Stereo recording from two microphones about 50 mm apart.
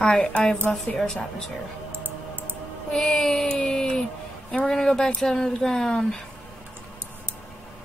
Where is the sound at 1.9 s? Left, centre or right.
Right.